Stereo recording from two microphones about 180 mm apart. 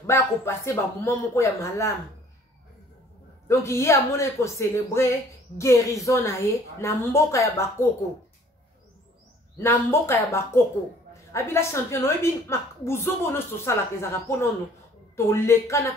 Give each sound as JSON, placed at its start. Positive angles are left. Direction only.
{"t": 0.0, "sound": "a woman's voice", "side_deg": 15}
{"t": 3.4, "sound": "a woman's voice", "side_deg": 15}
{"t": 9.6, "sound": "a woman's voice", "side_deg": 15}
{"t": 15.1, "sound": "a woman's voice", "side_deg": 15}